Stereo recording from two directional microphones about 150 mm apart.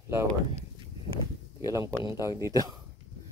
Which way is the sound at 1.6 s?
20° right (ahead or behind).